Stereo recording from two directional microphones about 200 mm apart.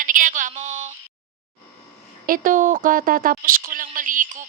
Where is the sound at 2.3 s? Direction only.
40° right (ahead or behind).